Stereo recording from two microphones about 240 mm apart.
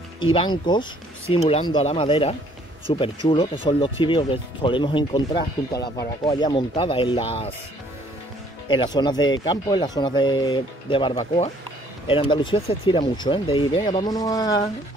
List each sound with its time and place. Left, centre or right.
0.2 s speech: left
8.6 s speech: centre